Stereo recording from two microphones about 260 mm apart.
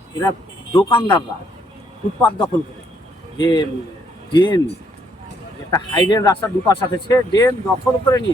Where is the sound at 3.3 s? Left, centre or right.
Centre.